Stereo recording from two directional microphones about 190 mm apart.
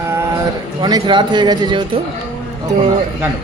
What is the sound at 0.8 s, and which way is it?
Speech, 20° right (ahead or behind).